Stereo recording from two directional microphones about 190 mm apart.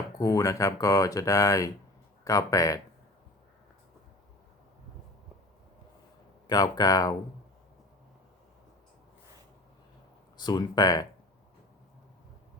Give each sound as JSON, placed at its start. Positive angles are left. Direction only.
{"t": 0.2, "sound": "speech", "side_deg": 15}
{"t": 6.5, "sound": "speech", "side_deg": 20}
{"t": 10.3, "sound": "speech", "side_deg": 20}